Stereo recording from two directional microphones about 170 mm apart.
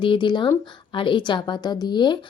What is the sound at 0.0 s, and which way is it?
A woman's voice, 30° left (ahead or behind).